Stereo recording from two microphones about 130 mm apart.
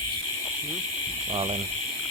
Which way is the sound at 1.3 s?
45° right (ahead or behind).